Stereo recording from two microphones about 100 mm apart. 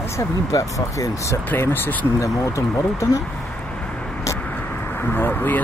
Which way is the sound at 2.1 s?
30° left (ahead or behind).